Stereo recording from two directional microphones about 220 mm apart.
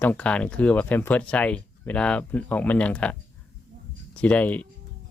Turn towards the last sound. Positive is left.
turn(degrees=5)  # may be behind; listen again after turning